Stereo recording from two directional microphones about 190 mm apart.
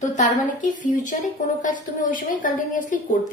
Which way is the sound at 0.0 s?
40° left (ahead or behind).